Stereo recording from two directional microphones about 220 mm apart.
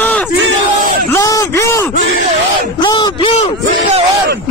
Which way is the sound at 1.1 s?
15° left (ahead or behind).